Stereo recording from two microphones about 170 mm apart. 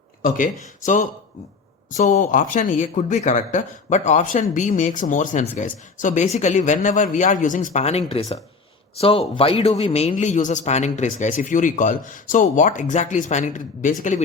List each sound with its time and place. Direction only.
0.2 s speech: 50° left (ahead or behind)
1.9 s a man's voice: 45° left (ahead or behind)